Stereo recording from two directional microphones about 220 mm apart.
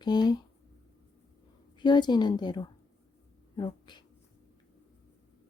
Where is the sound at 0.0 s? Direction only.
20° left (ahead or behind).